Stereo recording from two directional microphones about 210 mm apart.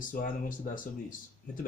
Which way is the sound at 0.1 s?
40° left (ahead or behind).